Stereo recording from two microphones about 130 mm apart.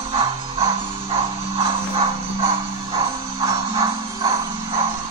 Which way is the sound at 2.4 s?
45° right (ahead or behind).